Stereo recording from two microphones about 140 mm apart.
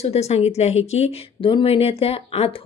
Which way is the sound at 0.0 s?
50° left (ahead or behind).